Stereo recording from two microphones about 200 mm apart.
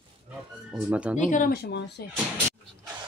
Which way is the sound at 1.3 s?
45° left (ahead or behind).